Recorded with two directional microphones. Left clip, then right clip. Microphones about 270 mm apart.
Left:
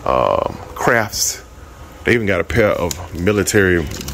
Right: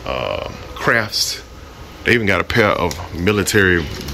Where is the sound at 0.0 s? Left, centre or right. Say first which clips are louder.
Left 7 dB; left.